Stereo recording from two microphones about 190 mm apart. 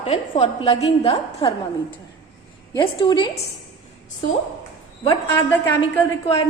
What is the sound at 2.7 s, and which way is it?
Speech, 25° left (ahead or behind).